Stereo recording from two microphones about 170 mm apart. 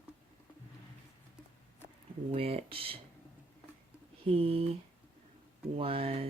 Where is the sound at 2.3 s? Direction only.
35° right (ahead or behind).